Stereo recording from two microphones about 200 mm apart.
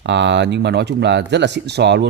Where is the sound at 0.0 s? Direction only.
60° right (ahead or behind).